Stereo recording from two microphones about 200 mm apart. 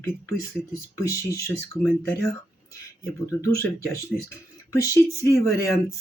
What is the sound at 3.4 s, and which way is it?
Speech, 15° left (ahead or behind).